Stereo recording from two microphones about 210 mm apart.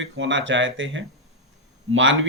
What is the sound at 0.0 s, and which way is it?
Speech, 60° right (ahead or behind).